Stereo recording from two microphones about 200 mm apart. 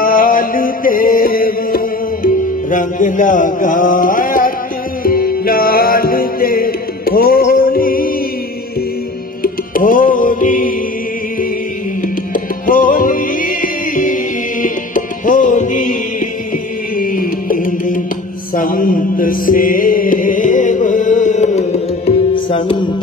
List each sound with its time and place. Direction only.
0.0 s music: 45° left (ahead or behind)
9.4 s music: 45° left (ahead or behind)
12.6 s music: 45° left (ahead or behind)
17.0 s music: 45° left (ahead or behind)
18.5 s mantra: 45° left (ahead or behind); by 22.6 s 30° left (ahead or behind)